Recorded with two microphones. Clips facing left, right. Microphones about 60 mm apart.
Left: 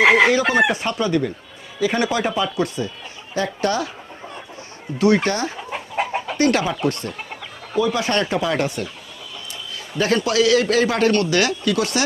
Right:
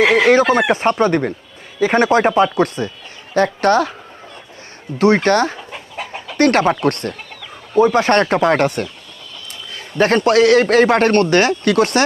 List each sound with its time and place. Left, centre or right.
0.0 s chicken: left
0.7 s a man's voice: right
4.9 s a man's voice: right
5.3 s a man's voice: right
5.7 s chicken: left
6.3 s a man's voice: right
10.0 s a man's voice: right
11.6 s a man's voice: right